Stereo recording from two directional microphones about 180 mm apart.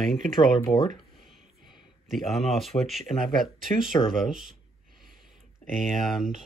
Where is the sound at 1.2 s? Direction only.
Centre (ahead or behind).